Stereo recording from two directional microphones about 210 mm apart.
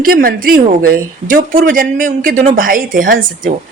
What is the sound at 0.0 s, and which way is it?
A woman's voice, 40° right (ahead or behind).